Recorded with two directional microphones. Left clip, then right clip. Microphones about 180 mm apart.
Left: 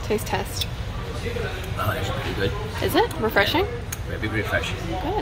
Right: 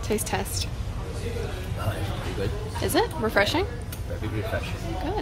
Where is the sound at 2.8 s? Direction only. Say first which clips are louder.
Left 3 dB; centre (ahead or behind).